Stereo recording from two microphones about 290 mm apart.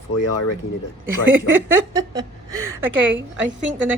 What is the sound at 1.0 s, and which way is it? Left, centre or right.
Speech, right.